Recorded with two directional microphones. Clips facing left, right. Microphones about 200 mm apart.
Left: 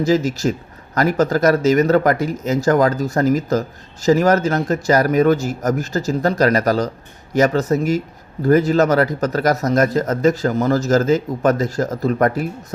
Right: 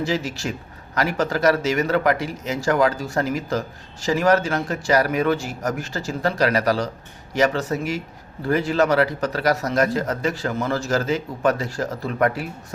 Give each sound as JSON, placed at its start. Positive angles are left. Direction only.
{"t": 0.0, "sound": "a man's voice", "side_deg": 40}